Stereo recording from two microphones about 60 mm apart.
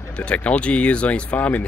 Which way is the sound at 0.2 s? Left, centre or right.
Left.